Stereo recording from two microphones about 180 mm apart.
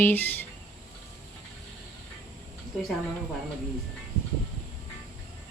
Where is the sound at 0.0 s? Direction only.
10° left (ahead or behind).